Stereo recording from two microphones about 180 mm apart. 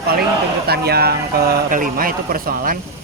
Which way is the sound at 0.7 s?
60° right (ahead or behind).